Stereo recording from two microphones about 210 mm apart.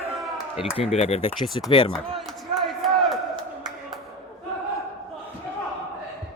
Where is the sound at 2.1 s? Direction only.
Centre (ahead or behind).